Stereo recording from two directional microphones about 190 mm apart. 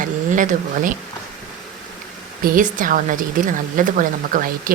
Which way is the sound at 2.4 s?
45° right (ahead or behind).